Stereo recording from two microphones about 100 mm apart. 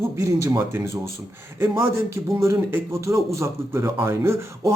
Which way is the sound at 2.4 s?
30° right (ahead or behind).